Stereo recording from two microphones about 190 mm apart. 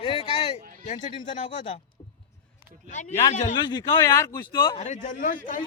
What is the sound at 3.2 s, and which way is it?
Speech, 35° left (ahead or behind).